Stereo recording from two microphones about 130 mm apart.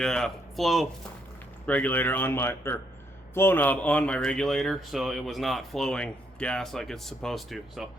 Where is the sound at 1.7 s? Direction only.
10° left (ahead or behind).